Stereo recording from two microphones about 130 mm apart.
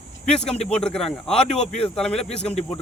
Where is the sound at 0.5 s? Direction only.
55° left (ahead or behind).